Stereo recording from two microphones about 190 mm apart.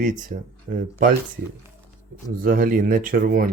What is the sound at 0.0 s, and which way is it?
Speech, 45° right (ahead or behind).